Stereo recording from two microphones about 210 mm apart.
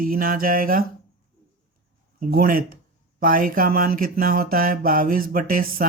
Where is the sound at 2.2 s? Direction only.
45° right (ahead or behind).